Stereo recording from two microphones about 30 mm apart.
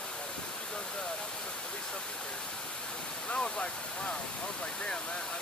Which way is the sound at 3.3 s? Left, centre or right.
Left.